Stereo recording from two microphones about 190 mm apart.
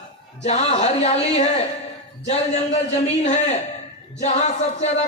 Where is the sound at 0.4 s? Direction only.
35° left (ahead or behind).